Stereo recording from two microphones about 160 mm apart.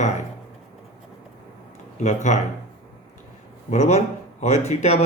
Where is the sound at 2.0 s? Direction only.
50° left (ahead or behind).